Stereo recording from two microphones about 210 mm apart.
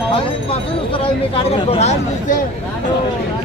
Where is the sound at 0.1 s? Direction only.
25° left (ahead or behind).